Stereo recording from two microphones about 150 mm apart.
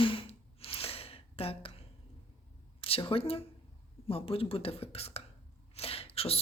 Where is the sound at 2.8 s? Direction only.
35° left (ahead or behind).